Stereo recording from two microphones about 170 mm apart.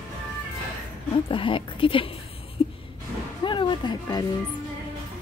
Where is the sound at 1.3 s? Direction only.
30° left (ahead or behind).